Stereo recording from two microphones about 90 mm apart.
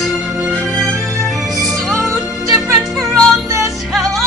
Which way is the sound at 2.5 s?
Centre (ahead or behind).